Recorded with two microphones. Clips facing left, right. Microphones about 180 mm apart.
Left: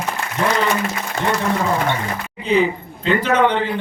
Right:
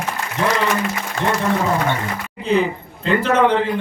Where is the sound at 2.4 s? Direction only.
Centre (ahead or behind).